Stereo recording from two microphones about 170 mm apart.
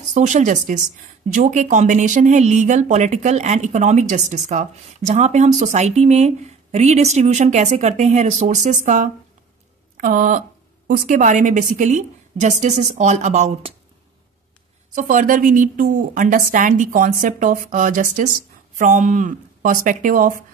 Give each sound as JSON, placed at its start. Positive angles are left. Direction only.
{"t": 0.1, "sound": "speech", "side_deg": -45}
{"t": 15.0, "sound": "speech", "side_deg": -50}